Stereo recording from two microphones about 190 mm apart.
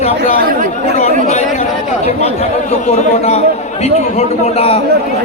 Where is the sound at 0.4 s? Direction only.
50° right (ahead or behind).